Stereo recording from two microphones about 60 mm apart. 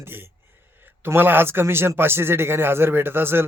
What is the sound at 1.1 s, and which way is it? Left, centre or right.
A man's voice, right.